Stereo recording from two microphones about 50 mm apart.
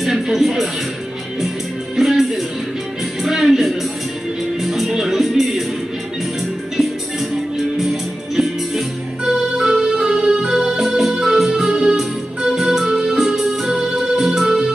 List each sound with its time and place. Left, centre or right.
0.0 s music: centre
2.0 s music: centre
7.8 s music: centre